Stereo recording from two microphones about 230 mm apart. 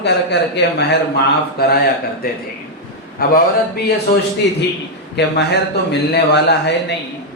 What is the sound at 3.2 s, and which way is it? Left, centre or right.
Speech, left.